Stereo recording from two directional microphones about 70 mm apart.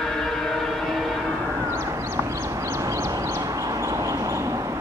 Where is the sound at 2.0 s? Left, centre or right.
Right.